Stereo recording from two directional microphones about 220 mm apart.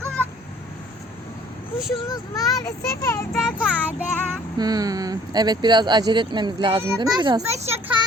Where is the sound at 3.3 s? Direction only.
Centre (ahead or behind); by 8.0 s 25° right (ahead or behind).